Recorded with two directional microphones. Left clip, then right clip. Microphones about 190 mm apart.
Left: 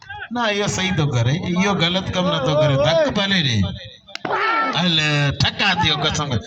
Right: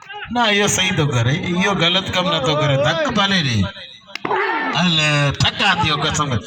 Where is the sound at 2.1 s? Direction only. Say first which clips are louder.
Right 2 dB; 15° left (ahead or behind).